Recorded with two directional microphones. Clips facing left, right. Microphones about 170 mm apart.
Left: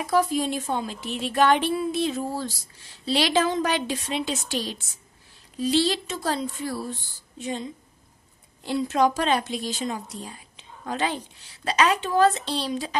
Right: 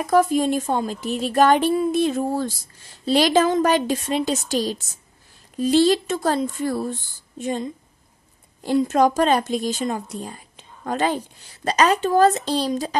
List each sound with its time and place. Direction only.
0.0 s speech: 50° right (ahead or behind)